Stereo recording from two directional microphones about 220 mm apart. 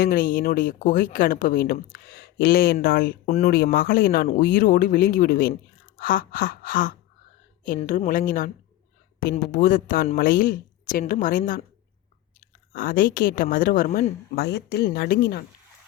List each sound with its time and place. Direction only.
0.0 s speech: 40° left (ahead or behind)
12.7 s speech: 40° left (ahead or behind)